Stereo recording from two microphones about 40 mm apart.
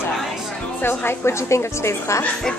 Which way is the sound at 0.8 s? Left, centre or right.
Left.